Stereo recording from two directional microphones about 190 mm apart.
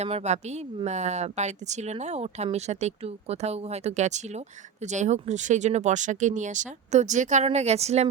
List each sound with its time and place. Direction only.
0.0 s a woman's voice: 35° right (ahead or behind)